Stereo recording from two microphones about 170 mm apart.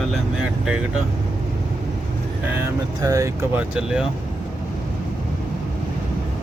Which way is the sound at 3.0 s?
20° right (ahead or behind).